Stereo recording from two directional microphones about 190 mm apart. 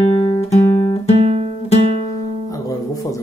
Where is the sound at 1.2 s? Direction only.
35° right (ahead or behind).